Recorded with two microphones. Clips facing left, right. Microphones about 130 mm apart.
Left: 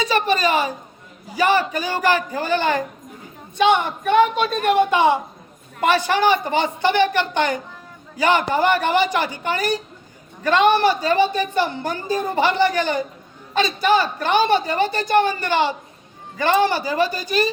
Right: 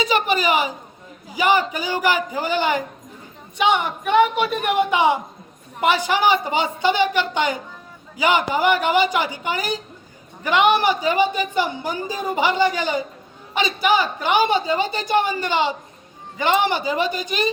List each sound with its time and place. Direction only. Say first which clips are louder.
0.0 s a woman's voice: left 1 dB; 15° right (ahead or behind)